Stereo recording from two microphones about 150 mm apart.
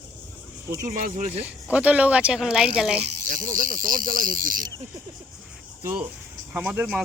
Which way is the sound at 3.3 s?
65° right (ahead or behind).